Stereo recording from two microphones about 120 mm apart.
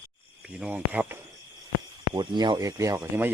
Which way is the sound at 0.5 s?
10° right (ahead or behind).